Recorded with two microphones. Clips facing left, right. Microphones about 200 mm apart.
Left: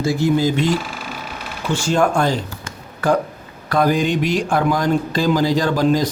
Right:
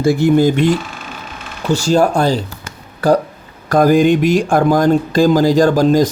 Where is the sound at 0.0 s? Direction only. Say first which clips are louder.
Right 6 dB; 60° right (ahead or behind).